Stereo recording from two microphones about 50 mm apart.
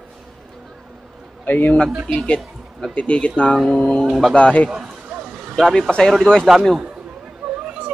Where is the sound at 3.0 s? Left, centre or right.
Left.